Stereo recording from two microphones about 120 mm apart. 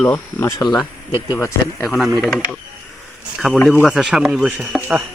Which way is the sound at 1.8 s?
Centre (ahead or behind).